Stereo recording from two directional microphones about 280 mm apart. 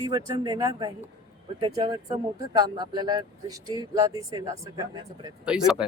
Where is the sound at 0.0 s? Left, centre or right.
Centre.